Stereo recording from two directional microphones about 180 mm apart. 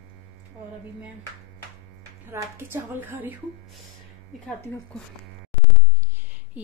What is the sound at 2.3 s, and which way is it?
Speech, 15° right (ahead or behind).